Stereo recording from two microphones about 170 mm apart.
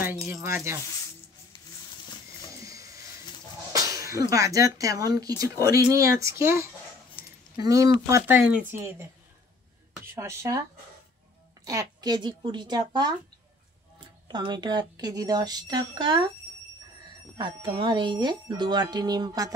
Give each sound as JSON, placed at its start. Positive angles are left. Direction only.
{"t": 0.3, "sound": "speech", "side_deg": -15}
{"t": 2.6, "sound": "wild animals", "side_deg": -20}
{"t": 3.7, "sound": "speech", "side_deg": -20}
{"t": 10.1, "sound": "speech", "side_deg": -15}
{"t": 11.6, "sound": "speech", "side_deg": -20}
{"t": 17.4, "sound": "speech", "side_deg": -25}